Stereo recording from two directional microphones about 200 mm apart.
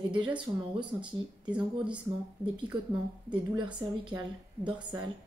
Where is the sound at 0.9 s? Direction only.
10° right (ahead or behind).